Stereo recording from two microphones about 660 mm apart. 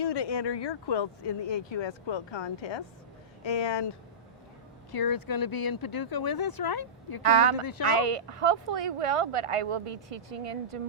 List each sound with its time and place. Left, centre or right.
0.0 s speech: left
7.2 s speech: right
7.6 s speech: left
7.9 s speech: right